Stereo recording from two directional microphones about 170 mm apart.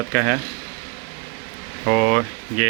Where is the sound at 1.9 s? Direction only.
40° right (ahead or behind).